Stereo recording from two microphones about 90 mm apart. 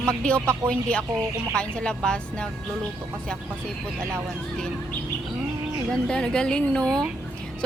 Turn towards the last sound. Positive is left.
turn(degrees=10)  # may be behind; listen again after turning